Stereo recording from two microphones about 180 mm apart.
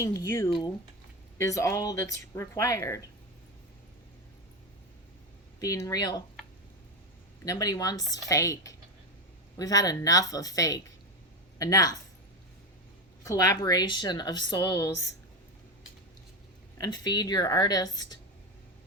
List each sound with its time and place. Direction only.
0.0 s speech: 20° left (ahead or behind)
5.5 s a woman's voice: 20° left (ahead or behind)
7.4 s a woman's voice: 20° left (ahead or behind)
13.2 s a woman's voice: 20° left (ahead or behind)
16.7 s a woman's voice: 20° left (ahead or behind)